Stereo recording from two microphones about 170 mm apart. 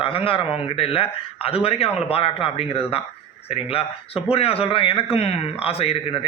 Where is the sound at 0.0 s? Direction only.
30° left (ahead or behind).